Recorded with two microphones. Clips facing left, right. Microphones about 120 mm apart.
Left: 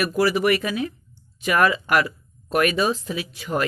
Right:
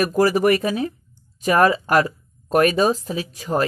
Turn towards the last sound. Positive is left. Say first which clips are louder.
# right 3 dB
turn(degrees=-40)  # may be behind; listen again after turning